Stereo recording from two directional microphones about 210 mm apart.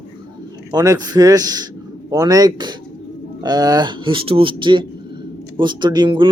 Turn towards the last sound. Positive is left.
turn(degrees=-25)  # may be behind; listen again after turning